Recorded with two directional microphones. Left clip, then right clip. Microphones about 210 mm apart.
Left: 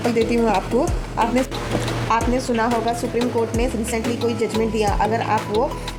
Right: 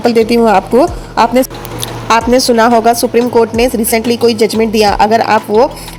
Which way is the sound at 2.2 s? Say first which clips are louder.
Right 12 dB; 40° right (ahead or behind).